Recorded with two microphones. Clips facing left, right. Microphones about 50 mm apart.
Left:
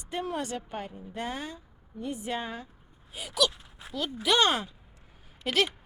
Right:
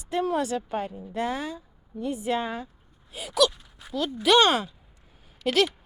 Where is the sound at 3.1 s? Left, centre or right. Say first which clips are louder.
Right 5 dB; right.